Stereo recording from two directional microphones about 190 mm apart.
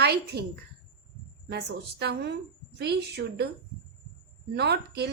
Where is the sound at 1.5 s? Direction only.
60° right (ahead or behind).